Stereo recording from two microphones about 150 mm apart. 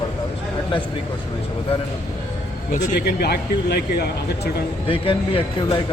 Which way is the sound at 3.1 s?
90° left.